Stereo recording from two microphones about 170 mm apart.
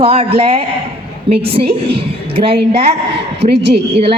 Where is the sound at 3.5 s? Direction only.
75° right (ahead or behind).